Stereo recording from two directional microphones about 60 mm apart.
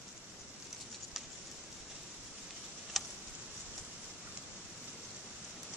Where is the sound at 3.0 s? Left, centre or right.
Centre.